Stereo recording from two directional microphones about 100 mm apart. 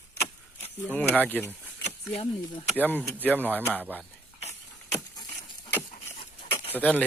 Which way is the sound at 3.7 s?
15° right (ahead or behind).